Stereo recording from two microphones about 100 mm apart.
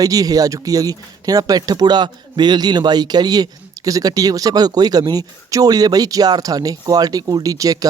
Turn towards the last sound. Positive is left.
turn(degrees=-35)  # may be behind; listen again after turning